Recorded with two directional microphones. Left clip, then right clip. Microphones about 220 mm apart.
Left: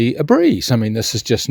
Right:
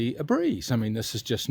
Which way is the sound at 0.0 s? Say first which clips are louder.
Left 12 dB; 35° left (ahead or behind).